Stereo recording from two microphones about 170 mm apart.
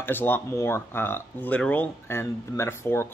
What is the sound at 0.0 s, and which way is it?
Speech, 10° left (ahead or behind).